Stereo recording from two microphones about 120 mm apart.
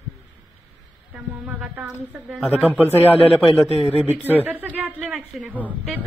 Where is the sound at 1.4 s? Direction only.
15° right (ahead or behind).